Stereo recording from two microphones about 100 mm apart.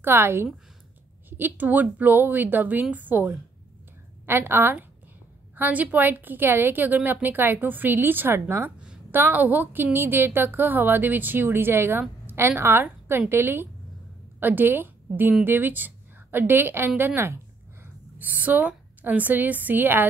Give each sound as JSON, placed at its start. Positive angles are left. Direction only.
{"t": 0.0, "sound": "a woman's voice", "side_deg": -25}